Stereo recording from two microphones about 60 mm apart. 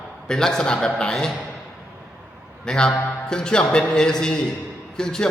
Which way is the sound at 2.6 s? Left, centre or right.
Centre.